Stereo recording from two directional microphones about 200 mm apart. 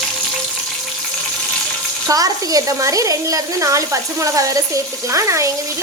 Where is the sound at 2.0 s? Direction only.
15° right (ahead or behind).